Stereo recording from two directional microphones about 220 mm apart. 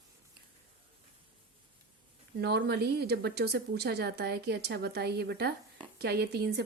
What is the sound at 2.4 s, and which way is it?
A woman's voice, 50° right (ahead or behind).